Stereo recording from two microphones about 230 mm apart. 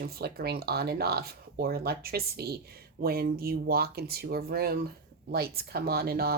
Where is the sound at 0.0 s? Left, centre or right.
Right.